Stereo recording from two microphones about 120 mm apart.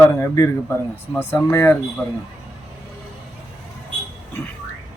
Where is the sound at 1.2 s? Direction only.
20° left (ahead or behind).